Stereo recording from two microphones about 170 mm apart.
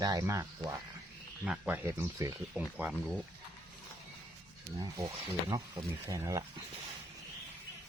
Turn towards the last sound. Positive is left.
turn(degrees=-20)  # may be behind; listen again after turning